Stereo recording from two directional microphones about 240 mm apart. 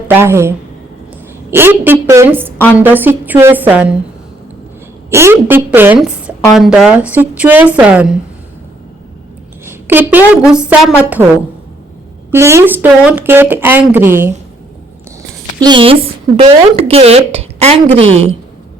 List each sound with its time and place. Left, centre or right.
0.1 s speech: centre
5.1 s speech: centre
9.6 s a woman's voice: centre
12.3 s speech: centre
15.6 s a woman's voice: right